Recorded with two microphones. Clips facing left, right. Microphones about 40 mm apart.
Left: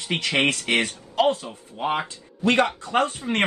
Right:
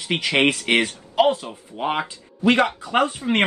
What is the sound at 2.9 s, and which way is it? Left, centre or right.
Speech, right.